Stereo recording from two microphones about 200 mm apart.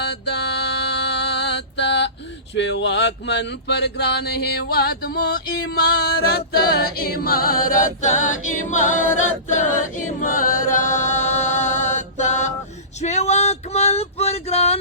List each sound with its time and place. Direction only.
0.0 s music: 55° left (ahead or behind)
2.6 s a sound: 60° left (ahead or behind); by 9.0 s 40° left (ahead or behind)
9.5 s a capella: 40° left (ahead or behind)
13.0 s male singing: 35° left (ahead or behind)